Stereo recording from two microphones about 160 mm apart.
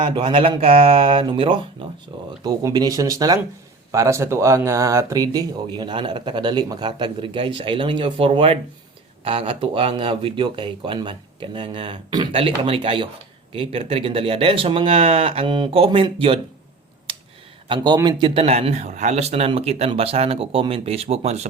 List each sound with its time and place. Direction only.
0.1 s speech: 30° right (ahead or behind)
17.1 s a sound: 35° right (ahead or behind)
17.7 s speech: 25° right (ahead or behind)